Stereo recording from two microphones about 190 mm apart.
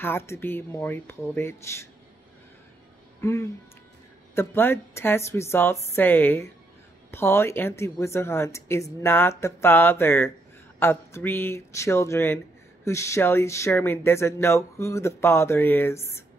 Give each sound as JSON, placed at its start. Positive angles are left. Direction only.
{"t": 0.0, "sound": "speech", "side_deg": 15}
{"t": 3.2, "sound": "speech", "side_deg": 15}